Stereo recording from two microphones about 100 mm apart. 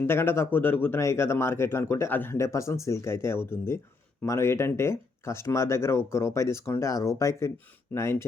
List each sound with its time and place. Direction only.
0.0 s speech: 25° left (ahead or behind)